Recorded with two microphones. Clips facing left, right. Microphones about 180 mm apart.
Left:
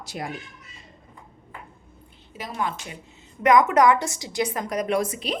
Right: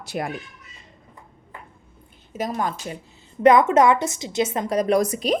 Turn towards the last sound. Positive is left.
turn(degrees=-40)  # may be behind; listen again after turning